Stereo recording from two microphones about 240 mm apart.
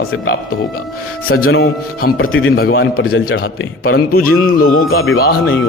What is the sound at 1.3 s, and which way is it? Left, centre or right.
Speech, left.